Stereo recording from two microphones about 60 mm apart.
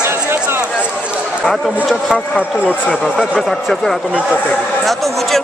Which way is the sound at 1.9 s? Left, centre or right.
Centre.